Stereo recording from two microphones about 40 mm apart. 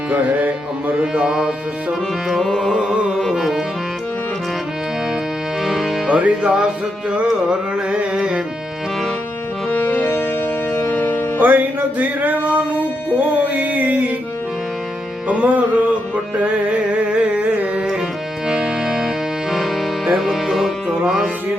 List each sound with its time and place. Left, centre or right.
0.1 s music: right
1.1 s music: centre
2.4 s carnatic music: centre
5.6 s music: centre
6.1 s music: right
8.1 s music: right
9.6 s music: left
10.0 s music: left
10.8 s music: left
11.3 s music: right
15.3 s music: right
16.4 s carnatic music: right
18.4 s music: centre
21.0 s music: centre